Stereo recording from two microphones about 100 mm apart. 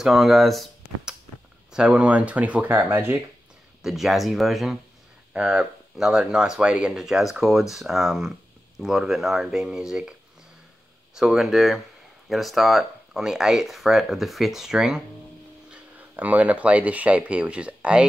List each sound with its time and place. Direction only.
0.0 s speech: centre (ahead or behind); by 3.2 s 20° right (ahead or behind)
3.8 s speech: centre (ahead or behind)
11.1 s speech: 5° right (ahead or behind)
15.7 s speech: 15° right (ahead or behind)